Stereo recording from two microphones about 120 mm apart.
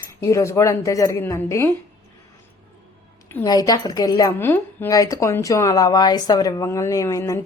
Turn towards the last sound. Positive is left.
turn(degrees=25)  # may be behind; listen again after turning